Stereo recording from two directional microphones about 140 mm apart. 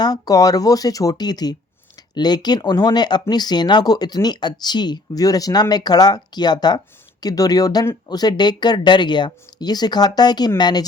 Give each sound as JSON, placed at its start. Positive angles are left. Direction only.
{"t": 0.0, "sound": "a woman's voice", "side_deg": 25}